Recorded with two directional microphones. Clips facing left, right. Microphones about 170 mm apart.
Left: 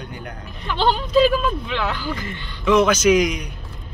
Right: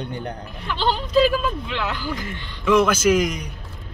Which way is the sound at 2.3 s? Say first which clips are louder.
Left 1 dB; 5° right (ahead or behind).